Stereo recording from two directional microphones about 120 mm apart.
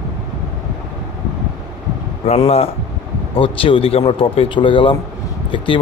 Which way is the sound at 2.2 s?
60° left (ahead or behind).